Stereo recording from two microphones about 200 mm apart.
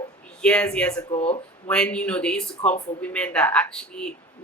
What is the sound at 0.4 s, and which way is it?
Speech, 5° left (ahead or behind).